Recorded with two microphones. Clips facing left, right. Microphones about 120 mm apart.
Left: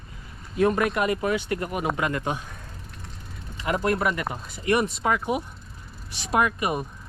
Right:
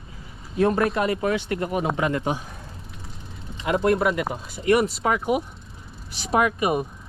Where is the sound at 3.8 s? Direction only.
Centre (ahead or behind).